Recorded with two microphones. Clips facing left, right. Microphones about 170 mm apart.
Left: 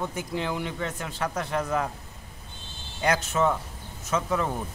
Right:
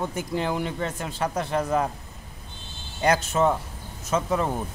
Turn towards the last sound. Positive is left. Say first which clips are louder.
# right 2 dB
turn(degrees=-25)  # may be behind; listen again after turning